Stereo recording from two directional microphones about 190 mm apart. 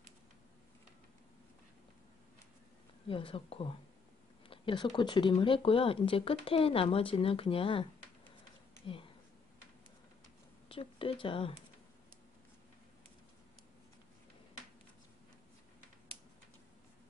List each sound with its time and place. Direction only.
3.1 s speech: 30° left (ahead or behind)
10.7 s speech: 30° left (ahead or behind)